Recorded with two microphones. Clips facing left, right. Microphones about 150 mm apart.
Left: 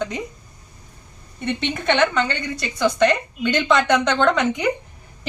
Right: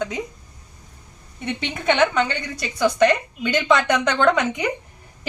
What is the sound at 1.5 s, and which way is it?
A woman's voice, 5° right (ahead or behind).